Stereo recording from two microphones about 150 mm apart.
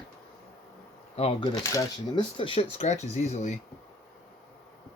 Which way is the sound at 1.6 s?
25° left (ahead or behind).